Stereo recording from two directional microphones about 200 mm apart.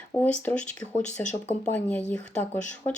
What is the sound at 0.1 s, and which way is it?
Speech, 10° left (ahead or behind).